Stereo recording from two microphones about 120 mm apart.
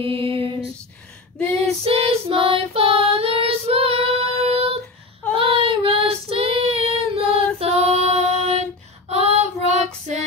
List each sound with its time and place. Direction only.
0.0 s female singing: 50° right (ahead or behind)
1.9 s child singing: 50° right (ahead or behind)